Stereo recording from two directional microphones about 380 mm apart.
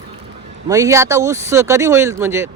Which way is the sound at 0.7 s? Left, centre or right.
Centre.